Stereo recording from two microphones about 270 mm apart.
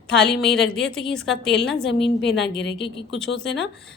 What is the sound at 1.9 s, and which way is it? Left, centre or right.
Speech, left.